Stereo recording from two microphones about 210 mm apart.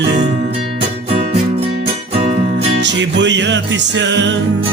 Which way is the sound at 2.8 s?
60° right (ahead or behind).